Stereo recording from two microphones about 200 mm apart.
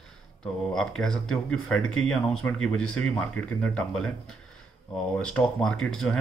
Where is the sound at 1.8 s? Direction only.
90° left.